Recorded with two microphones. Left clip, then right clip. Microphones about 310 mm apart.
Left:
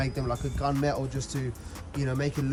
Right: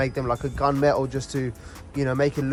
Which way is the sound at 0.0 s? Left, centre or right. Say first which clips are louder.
Right 7 dB; centre.